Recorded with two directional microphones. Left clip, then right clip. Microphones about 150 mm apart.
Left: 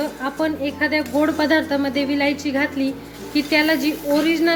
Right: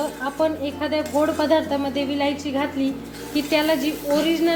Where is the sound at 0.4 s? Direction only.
25° left (ahead or behind).